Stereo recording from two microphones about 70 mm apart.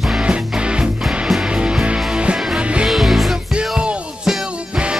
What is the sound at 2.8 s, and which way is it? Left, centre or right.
Music, centre.